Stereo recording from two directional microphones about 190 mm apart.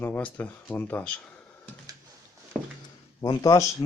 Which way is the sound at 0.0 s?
10° left (ahead or behind).